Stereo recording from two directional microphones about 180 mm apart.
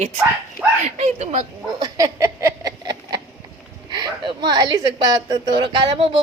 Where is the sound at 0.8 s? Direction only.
40° right (ahead or behind).